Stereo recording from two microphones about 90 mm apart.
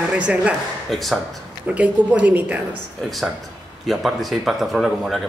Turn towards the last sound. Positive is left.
turn(degrees=0)  # may be behind; listen again after turning